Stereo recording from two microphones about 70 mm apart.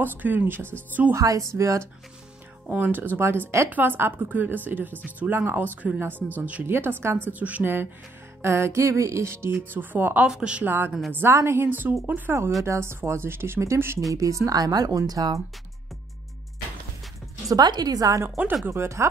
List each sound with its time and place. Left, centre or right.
0.0 s a woman's voice: right
1.1 s speech: right
2.7 s a woman's voice: right
3.7 s a woman's voice: right
6.7 s a woman's voice: right
7.3 s a woman's voice: right
10.2 s speech: centre
10.6 s a woman's voice: right
17.5 s speech: right
18.7 s speech: right